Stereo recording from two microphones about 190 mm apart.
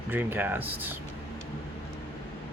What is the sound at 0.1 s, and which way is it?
Speech, 10° right (ahead or behind).